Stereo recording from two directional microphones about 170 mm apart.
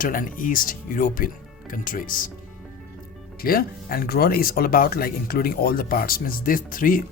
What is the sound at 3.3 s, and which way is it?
Speech, 60° left (ahead or behind).